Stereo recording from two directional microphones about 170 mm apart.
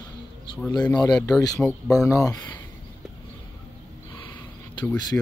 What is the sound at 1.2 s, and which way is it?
Speech, 20° left (ahead or behind).